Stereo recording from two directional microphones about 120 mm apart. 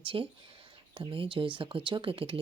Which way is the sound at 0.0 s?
45° right (ahead or behind).